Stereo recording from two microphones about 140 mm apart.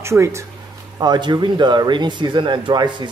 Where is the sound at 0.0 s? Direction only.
20° right (ahead or behind).